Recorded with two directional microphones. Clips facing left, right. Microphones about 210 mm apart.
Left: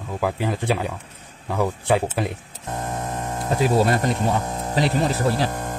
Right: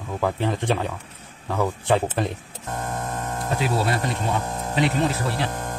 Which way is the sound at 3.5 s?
45° left (ahead or behind).